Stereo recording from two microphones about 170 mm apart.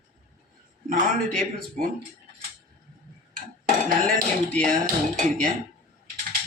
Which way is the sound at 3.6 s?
55° right (ahead or behind).